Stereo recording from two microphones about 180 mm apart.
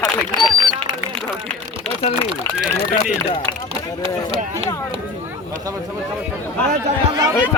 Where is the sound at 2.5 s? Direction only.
5° right (ahead or behind).